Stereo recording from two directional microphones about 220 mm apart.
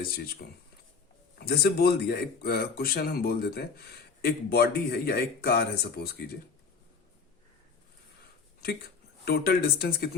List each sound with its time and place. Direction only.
1.4 s speech: 45° left (ahead or behind)
9.2 s speech: 45° left (ahead or behind)